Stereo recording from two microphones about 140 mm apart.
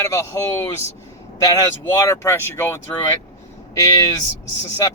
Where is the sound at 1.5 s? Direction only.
25° left (ahead or behind).